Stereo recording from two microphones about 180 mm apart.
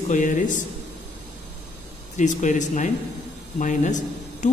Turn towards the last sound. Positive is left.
turn(degrees=45)  # may be behind; listen again after turning